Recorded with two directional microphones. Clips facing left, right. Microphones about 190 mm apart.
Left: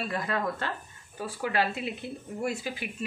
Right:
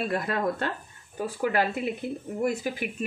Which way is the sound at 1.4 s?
45° right (ahead or behind).